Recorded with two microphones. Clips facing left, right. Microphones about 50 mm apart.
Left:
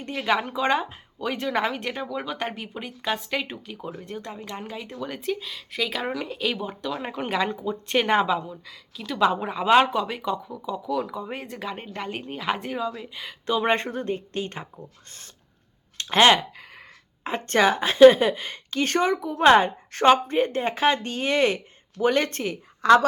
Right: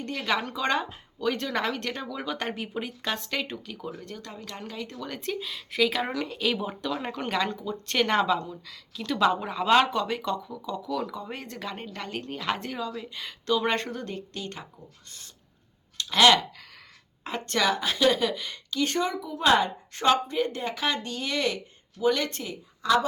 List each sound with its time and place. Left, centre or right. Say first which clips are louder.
0.0 s speech: left 4 dB; centre
3.8 s speech: left 3 dB; left; by 6.9 s centre
6.9 s speech: left 2 dB; centre
13.6 s speech: left 4 dB; left
16.0 s clicking: left 2 dB; left
17.2 s a woman's voice: left 5 dB; left